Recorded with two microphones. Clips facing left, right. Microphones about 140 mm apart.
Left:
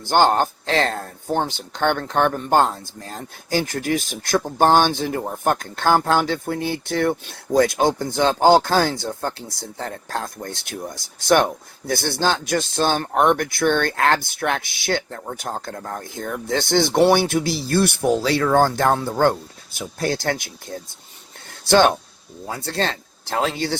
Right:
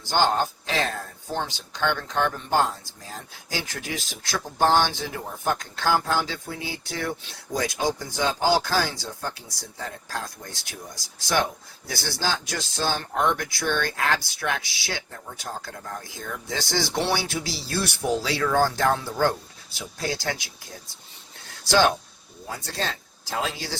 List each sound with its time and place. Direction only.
0.0 s speech: 55° left (ahead or behind)
0.3 s speech: 65° left (ahead or behind)
3.5 s speech: 50° left (ahead or behind)
21.6 s speech: 60° left (ahead or behind)